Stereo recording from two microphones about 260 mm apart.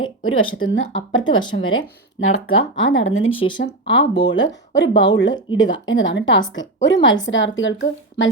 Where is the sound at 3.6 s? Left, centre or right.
Left.